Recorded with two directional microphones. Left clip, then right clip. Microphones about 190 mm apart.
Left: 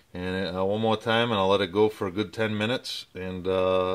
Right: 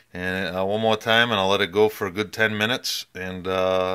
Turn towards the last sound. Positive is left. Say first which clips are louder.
# right 2 dB
turn(degrees=-10)  # may be behind; listen again after turning